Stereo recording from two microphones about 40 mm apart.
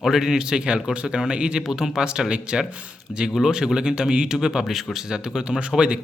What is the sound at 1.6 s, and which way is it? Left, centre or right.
Speech, centre.